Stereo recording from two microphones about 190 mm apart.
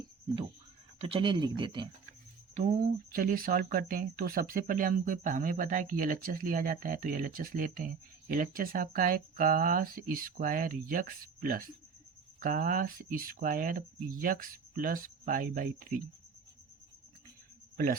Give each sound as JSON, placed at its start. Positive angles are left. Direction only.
{"t": 0.9, "sound": "speech", "side_deg": -30}
{"t": 2.6, "sound": "speech", "side_deg": -40}